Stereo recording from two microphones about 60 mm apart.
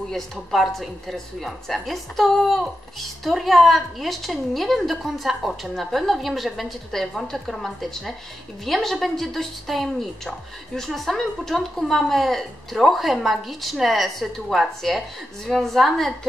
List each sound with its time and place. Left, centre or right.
0.1 s a woman's voice: centre